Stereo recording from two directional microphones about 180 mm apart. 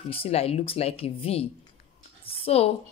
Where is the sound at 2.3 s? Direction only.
35° left (ahead or behind).